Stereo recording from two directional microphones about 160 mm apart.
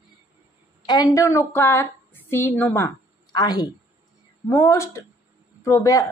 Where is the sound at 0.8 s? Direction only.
25° left (ahead or behind).